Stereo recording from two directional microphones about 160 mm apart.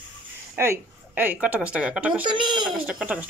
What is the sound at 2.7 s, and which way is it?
Speech, 5° right (ahead or behind).